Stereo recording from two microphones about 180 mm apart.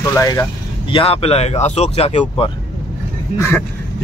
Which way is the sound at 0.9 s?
30° left (ahead or behind).